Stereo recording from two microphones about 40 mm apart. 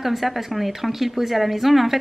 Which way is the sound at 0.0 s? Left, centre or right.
Centre.